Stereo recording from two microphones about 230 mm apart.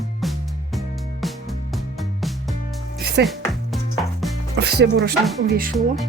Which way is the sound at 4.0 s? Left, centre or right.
Centre.